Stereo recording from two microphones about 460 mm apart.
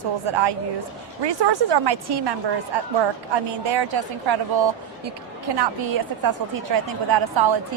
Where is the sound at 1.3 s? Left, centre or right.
Right.